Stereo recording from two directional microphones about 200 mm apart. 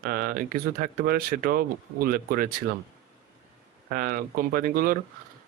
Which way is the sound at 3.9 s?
45° right (ahead or behind).